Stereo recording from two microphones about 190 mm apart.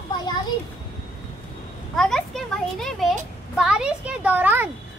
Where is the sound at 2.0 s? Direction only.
5° left (ahead or behind).